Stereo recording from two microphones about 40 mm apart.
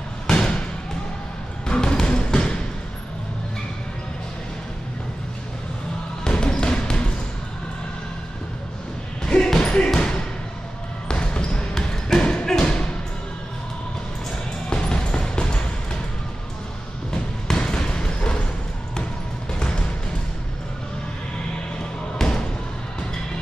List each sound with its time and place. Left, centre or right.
0.4 s a sound: centre
1.7 s music: left
6.2 s basketball bounce: left
9.2 s basketball bounce: centre
12.6 s music: left
14.7 s music: left
17.1 s basketball bounce: centre
22.2 s basketball bounce: left